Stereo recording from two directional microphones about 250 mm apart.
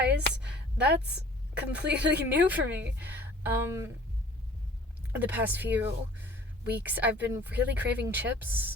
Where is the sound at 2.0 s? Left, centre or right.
Right.